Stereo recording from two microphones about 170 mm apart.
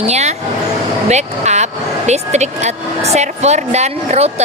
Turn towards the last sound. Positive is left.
turn(degrees=-40)  # may be behind; listen again after turning